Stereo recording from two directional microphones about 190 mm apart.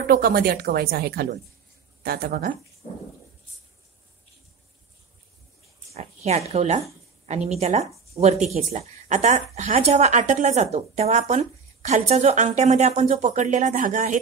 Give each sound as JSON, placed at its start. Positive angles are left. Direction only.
{"t": 0.0, "sound": "speech", "side_deg": -55}
{"t": 5.9, "sound": "a woman's voice", "side_deg": -35}